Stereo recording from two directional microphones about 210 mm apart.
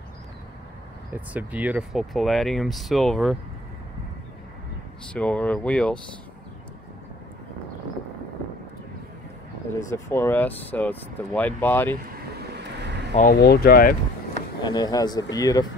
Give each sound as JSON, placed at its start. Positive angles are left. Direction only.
{"t": 1.1, "sound": "speech", "side_deg": -5}
{"t": 5.0, "sound": "speech", "side_deg": 5}
{"t": 9.8, "sound": "speech", "side_deg": 15}
{"t": 12.1, "sound": "vehicle", "side_deg": -50}
{"t": 13.1, "sound": "speech", "side_deg": 40}
{"t": 14.6, "sound": "speech", "side_deg": 20}